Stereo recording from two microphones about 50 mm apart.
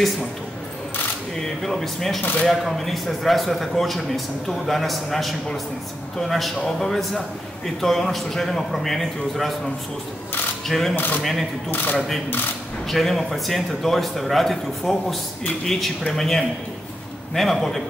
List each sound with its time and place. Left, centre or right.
1.6 s speech: centre
10.7 s speech: centre
11.7 s speech: left
12.8 s a man's voice: centre